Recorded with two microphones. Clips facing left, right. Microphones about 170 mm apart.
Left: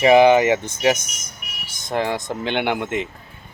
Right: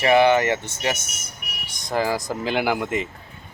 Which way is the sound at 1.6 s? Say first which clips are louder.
Even; centre (ahead or behind).